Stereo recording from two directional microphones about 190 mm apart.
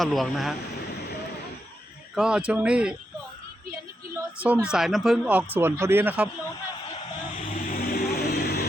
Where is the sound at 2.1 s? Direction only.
5° right (ahead or behind).